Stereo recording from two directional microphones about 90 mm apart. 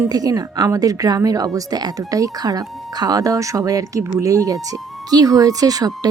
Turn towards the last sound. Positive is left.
turn(degrees=-45)  # may be behind; listen again after turning